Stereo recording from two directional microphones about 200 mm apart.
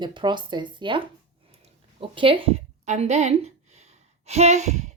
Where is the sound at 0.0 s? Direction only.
20° right (ahead or behind).